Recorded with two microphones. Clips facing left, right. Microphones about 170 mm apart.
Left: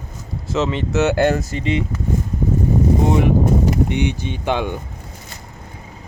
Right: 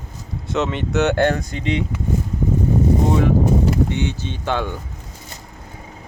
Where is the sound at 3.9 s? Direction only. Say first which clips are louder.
Left 3 dB; 15° left (ahead or behind).